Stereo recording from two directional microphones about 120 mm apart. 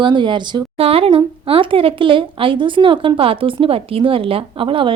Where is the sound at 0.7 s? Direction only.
55° right (ahead or behind).